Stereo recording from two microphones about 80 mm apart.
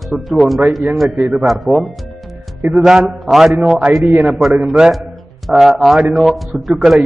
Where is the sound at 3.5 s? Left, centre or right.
Centre.